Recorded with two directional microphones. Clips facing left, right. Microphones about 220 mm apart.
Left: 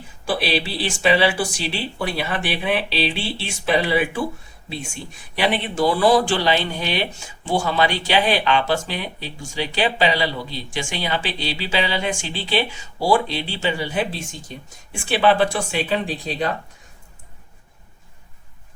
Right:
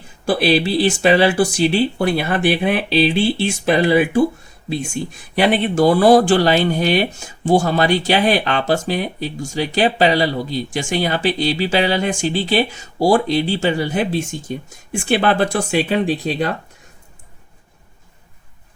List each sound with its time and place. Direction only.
0.3 s speech: 45° right (ahead or behind)
5.3 s speech: 45° right (ahead or behind)